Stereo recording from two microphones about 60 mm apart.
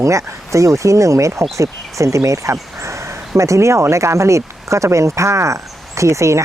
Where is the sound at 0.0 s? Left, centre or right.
Right.